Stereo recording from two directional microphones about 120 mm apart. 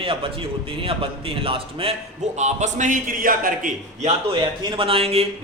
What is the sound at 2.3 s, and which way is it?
Speech, 80° right.